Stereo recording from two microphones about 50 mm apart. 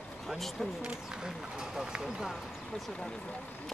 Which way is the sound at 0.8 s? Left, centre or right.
Centre.